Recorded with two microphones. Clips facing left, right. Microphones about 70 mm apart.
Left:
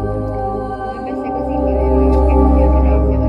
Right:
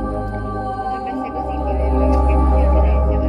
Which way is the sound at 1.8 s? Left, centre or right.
Centre.